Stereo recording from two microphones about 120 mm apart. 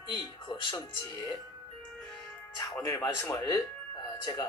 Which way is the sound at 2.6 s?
25° left (ahead or behind).